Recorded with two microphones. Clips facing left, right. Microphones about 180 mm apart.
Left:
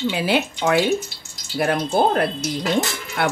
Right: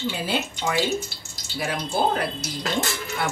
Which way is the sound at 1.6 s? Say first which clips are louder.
Left 6 dB; 55° left (ahead or behind).